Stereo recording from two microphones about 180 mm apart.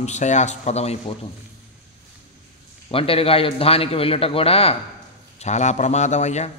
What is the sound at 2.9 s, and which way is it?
A man's voice, 30° left (ahead or behind).